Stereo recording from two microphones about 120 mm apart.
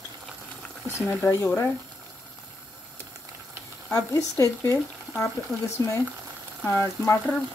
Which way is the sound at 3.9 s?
25° left (ahead or behind).